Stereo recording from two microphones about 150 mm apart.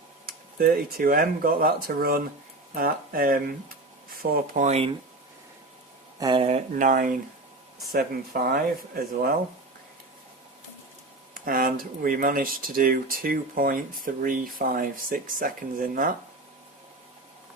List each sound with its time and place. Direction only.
0.3 s speech: 70° right (ahead or behind)
4.6 s speech: 45° right (ahead or behind)
6.1 s speech: 30° right (ahead or behind)
6.7 s speech: 60° right (ahead or behind)
7.9 s speech: 85° right
11.3 s speech: 70° right (ahead or behind)